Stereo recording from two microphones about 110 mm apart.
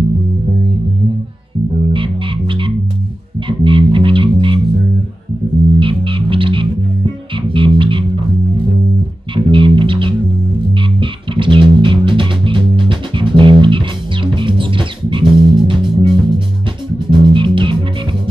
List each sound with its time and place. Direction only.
1.9 s music: 50° right (ahead or behind)
5.8 s music: 50° right (ahead or behind)
9.3 s music: 50° right (ahead or behind)
15.2 s music: 5° right (ahead or behind)
15.6 s music: 50° right (ahead or behind)